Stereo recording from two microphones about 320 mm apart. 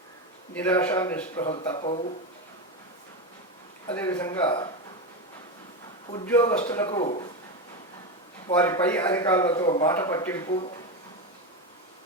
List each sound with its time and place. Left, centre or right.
0.5 s a man's voice: centre
1.6 s a man's voice: centre
3.9 s a man's voice: centre
6.2 s a man's voice: centre
8.5 s a man's voice: centre